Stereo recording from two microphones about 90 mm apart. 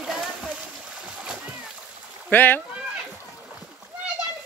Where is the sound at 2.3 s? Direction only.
20° left (ahead or behind).